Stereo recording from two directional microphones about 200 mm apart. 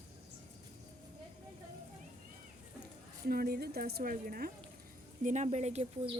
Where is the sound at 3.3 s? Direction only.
50° right (ahead or behind).